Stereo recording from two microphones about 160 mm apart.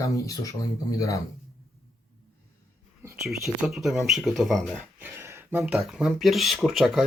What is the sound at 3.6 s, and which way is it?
Speech, centre (ahead or behind).